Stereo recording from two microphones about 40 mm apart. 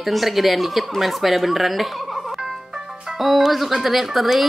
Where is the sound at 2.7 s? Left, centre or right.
Centre.